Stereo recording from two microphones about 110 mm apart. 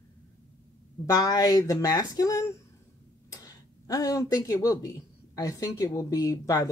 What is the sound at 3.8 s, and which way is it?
A woman's voice, 30° left (ahead or behind).